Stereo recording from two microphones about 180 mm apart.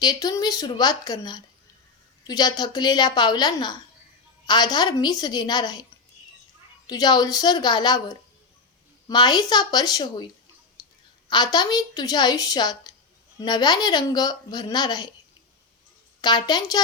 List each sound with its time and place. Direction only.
0.0 s speech: 20° left (ahead or behind)
6.8 s speech: 25° left (ahead or behind)
10.8 s clicking: 20° left (ahead or behind)
11.3 s speech: 25° left (ahead or behind)
16.2 s speech: 25° left (ahead or behind)